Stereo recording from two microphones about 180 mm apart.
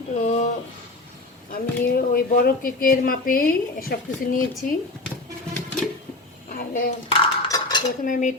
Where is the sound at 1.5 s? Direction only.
55° left (ahead or behind).